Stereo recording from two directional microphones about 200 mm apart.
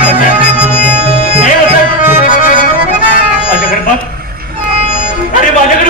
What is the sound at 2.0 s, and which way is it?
Music, 40° left (ahead or behind).